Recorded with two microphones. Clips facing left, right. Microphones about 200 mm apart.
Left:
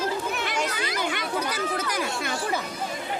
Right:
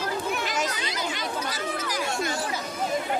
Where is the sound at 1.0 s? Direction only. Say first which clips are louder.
Left 3 dB; 60° left (ahead or behind).